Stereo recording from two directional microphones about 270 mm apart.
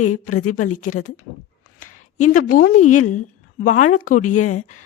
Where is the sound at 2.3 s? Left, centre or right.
Left.